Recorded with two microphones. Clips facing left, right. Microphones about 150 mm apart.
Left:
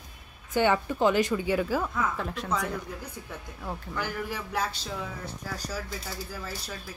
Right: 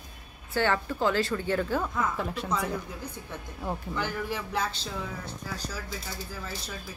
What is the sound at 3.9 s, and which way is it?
Speech, 10° left (ahead or behind).